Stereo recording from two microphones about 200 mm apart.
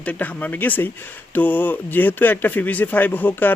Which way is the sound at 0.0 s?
5° left (ahead or behind).